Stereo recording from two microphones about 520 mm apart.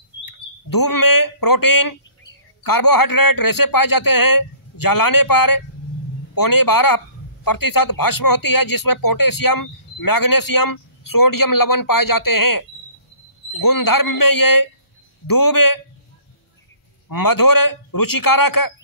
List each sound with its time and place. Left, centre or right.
0.2 s speech: left
17.1 s speech: left